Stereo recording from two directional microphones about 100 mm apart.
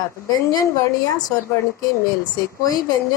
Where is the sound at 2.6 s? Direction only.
40° left (ahead or behind).